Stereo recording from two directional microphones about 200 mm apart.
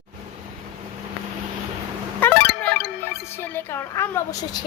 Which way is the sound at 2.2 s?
5° left (ahead or behind).